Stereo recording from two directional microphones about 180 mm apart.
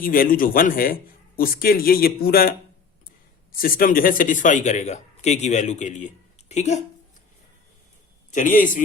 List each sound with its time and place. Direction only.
0.0 s a man's voice: 50° left (ahead or behind)
8.3 s a man's voice: 45° left (ahead or behind)